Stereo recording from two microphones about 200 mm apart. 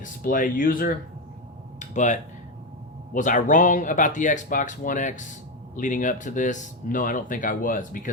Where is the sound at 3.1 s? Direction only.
40° left (ahead or behind).